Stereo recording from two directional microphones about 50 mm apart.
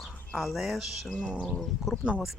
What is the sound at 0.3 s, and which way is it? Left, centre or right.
Speech, centre.